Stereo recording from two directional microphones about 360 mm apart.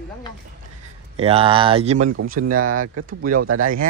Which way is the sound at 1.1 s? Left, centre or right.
Centre.